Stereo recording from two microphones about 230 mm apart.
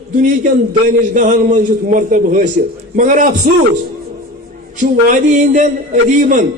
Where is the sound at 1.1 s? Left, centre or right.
Right.